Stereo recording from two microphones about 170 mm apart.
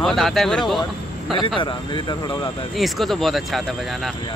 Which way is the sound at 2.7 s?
Centre (ahead or behind).